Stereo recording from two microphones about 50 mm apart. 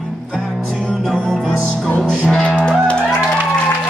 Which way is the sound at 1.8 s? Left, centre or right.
Left.